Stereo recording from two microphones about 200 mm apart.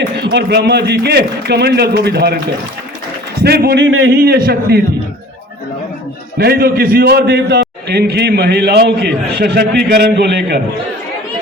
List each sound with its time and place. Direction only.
0.2 s a man's voice: 55° right (ahead or behind)
3.4 s a man's voice: 55° right (ahead or behind)
6.4 s a man's voice: 50° right (ahead or behind)